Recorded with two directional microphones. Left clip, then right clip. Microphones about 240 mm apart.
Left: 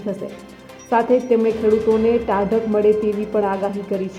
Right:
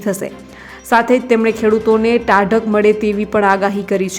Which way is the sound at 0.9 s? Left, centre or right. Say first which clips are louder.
Right 4 dB; centre.